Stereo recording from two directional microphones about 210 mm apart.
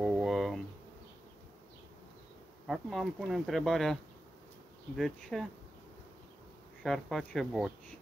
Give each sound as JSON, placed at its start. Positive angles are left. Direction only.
{"t": 0.0, "sound": "a sound", "side_deg": 0}
{"t": 2.6, "sound": "speech", "side_deg": 0}
{"t": 6.8, "sound": "speech", "side_deg": 0}